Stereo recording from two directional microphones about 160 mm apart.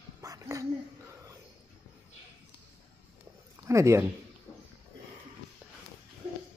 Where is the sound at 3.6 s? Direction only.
20° right (ahead or behind).